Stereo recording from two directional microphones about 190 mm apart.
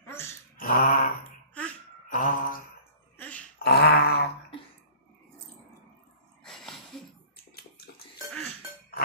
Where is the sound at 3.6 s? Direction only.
60° left (ahead or behind).